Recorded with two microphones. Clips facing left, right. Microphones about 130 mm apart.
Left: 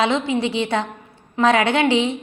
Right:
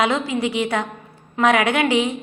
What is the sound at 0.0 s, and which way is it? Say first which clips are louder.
A woman's voice: left 1 dB; 25° left (ahead or behind).